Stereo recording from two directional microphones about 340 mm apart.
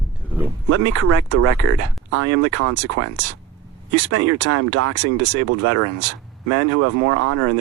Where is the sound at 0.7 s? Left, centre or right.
Right.